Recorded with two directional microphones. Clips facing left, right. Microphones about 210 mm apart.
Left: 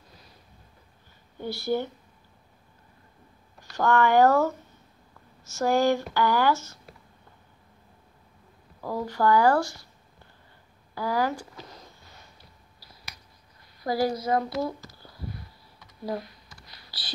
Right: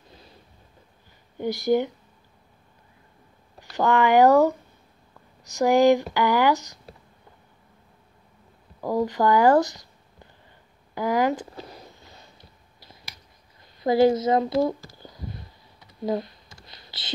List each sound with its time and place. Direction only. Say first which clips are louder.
1.4 s speech: right 6 dB; 15° right (ahead or behind)
3.7 s speech: right 2 dB; 15° right (ahead or behind)
8.8 s speech: right 3 dB; 15° right (ahead or behind)
11.0 s speech: right 4 dB; 20° right (ahead or behind)
13.7 s speech: right 8 dB; 25° right (ahead or behind)
15.0 s a sound: right 1 dB; 20° right (ahead or behind)